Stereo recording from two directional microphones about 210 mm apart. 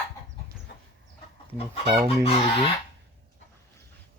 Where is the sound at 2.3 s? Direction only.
25° left (ahead or behind).